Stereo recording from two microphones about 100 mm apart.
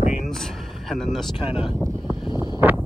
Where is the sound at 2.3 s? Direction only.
45° left (ahead or behind).